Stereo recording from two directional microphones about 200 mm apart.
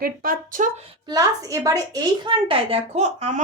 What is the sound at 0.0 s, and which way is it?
Speech, 45° right (ahead or behind).